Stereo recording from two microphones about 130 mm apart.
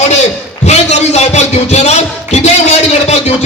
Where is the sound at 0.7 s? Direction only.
60° left (ahead or behind).